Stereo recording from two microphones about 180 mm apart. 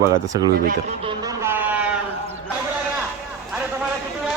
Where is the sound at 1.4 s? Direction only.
10° right (ahead or behind).